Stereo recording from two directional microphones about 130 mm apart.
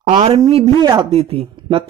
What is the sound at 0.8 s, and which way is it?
Speech, 35° right (ahead or behind).